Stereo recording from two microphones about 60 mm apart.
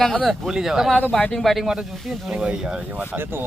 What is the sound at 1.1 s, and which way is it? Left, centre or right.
Speech, centre.